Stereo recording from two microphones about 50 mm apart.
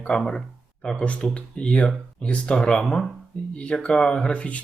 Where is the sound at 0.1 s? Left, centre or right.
Centre.